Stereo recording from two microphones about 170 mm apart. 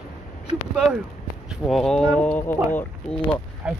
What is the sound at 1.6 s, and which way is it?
Speech, centre (ahead or behind).